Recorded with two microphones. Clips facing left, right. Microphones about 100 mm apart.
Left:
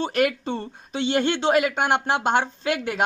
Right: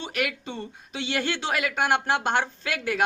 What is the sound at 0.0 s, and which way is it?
Speech, 35° left (ahead or behind).